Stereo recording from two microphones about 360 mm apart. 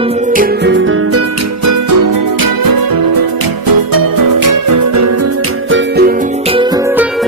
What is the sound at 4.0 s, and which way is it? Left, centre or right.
Music, right.